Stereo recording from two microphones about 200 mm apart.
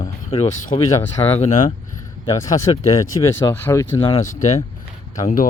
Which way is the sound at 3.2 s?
15° left (ahead or behind).